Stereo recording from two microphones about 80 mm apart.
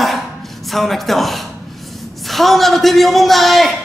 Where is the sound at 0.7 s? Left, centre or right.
Centre.